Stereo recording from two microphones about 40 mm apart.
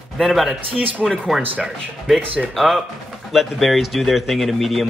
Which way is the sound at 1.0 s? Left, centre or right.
Centre.